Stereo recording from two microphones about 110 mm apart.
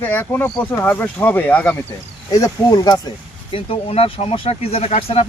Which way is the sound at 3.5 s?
60° left (ahead or behind).